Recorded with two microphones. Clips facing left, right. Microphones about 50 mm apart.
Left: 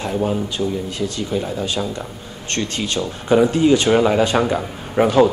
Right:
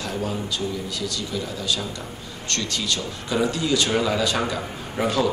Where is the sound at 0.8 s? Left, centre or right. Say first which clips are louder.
Left 5 dB; left.